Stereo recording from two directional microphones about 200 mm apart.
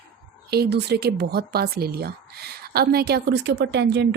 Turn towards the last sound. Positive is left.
turn(degrees=-60)  # may be behind; listen again after turning